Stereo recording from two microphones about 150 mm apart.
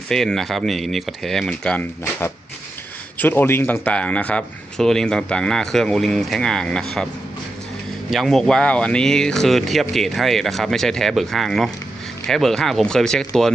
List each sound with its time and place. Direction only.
0.1 s speech: 5° left (ahead or behind)
3.2 s speech: 15° left (ahead or behind)
8.1 s speech: centre (ahead or behind)